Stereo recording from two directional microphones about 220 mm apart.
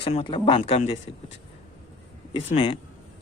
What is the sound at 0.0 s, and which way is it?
Speech, 25° left (ahead or behind).